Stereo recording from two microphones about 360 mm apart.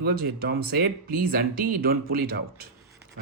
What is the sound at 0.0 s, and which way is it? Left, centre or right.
Speech, right.